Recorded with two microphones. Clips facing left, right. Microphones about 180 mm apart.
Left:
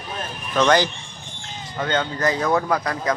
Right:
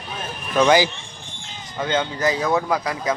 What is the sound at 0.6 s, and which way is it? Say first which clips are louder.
Speech: right 2 dB; 10° right (ahead or behind).